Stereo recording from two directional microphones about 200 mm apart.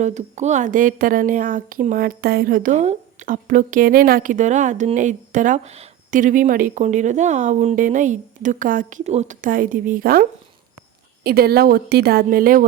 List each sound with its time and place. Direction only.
0.0 s speech: 35° right (ahead or behind)